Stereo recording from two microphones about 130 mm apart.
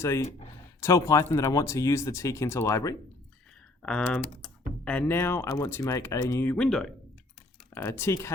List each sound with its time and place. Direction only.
0.0 s speech: 20° left (ahead or behind)
3.8 s speech: 10° left (ahead or behind)
5.1 s speech: 20° left (ahead or behind)
6.7 s speech: centre (ahead or behind)
7.7 s speech: 20° left (ahead or behind)